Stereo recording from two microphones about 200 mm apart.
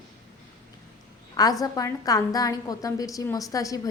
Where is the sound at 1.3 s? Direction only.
20° left (ahead or behind).